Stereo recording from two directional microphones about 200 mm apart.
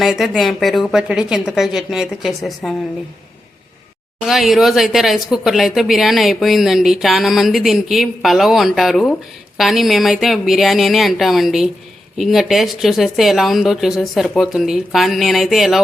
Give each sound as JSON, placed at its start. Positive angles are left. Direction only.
{"t": 0.0, "sound": "speech", "side_deg": 0}
{"t": 4.3, "sound": "speech", "side_deg": 0}